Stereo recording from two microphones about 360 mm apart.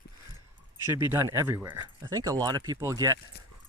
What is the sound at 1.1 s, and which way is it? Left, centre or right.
Speech, centre.